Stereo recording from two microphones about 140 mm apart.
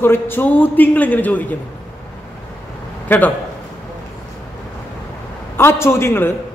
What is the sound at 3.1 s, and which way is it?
Speech, 15° left (ahead or behind).